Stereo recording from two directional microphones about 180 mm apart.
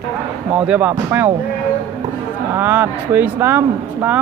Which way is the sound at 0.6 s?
10° right (ahead or behind).